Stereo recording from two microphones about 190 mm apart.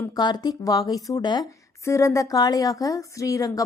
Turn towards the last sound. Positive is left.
turn(degrees=15)  # may be behind; listen again after turning